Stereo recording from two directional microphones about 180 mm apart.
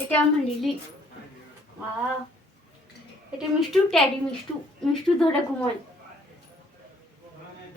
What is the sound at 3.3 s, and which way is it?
Speech, centre (ahead or behind).